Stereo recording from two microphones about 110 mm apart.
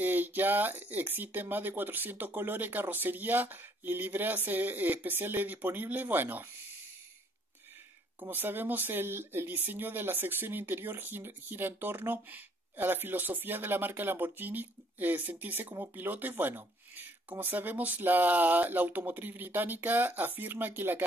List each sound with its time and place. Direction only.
0.0 s speech: 15° right (ahead or behind)
8.2 s speech: 20° right (ahead or behind)